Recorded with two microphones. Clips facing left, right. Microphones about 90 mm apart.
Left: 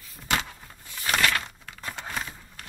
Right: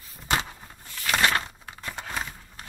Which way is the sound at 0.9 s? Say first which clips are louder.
Even; 5° left (ahead or behind).